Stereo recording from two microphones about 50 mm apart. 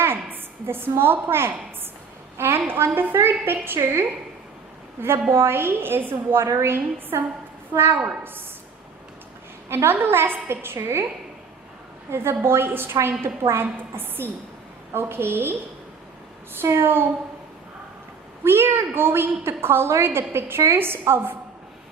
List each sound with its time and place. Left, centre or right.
0.0 s a woman's voice: right
4.9 s a woman's voice: right
7.7 s a woman's voice: right
9.6 s a woman's voice: right
12.1 s a woman's voice: right
16.6 s a woman's voice: right
18.4 s a woman's voice: right